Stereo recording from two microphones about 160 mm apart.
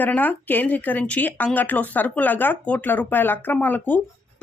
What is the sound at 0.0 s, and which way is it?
Speech, 10° left (ahead or behind).